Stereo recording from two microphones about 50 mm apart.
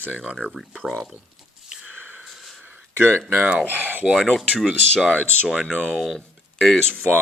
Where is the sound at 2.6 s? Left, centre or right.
Right.